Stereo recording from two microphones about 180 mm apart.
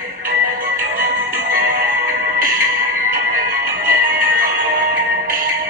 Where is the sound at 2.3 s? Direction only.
50° right (ahead or behind).